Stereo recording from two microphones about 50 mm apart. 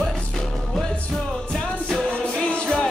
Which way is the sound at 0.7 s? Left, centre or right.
Centre.